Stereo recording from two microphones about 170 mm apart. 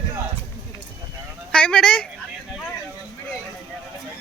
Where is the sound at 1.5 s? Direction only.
5° left (ahead or behind).